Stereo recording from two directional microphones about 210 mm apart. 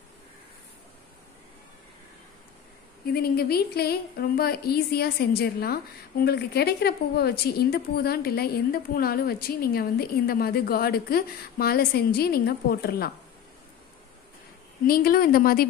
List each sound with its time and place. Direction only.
3.1 s speech: 45° left (ahead or behind)
14.9 s speech: 45° left (ahead or behind)